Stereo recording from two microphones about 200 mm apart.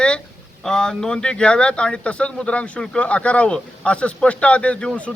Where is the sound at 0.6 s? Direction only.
5° left (ahead or behind).